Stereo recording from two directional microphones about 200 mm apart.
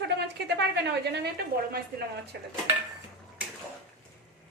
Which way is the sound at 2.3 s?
55° right (ahead or behind).